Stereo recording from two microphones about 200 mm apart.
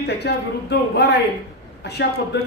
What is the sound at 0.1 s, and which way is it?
A man's voice, 55° left (ahead or behind).